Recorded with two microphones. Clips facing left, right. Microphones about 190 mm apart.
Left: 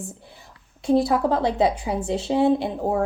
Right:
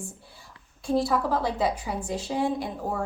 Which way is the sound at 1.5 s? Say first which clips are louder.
Left 6 dB; 25° left (ahead or behind).